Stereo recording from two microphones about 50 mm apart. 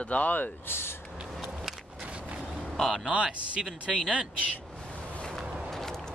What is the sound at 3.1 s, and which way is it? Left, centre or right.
Speech, right.